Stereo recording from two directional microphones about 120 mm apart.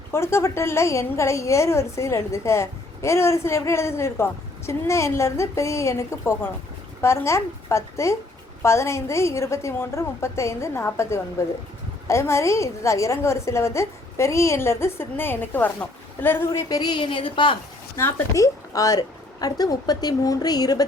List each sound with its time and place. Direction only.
0.1 s a woman's voice: 20° left (ahead or behind)
16.5 s a woman's voice: 30° left (ahead or behind)
17.9 s a woman's voice: 25° left (ahead or behind)